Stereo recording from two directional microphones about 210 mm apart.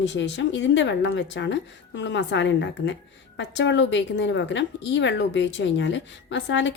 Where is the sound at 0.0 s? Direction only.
60° left (ahead or behind).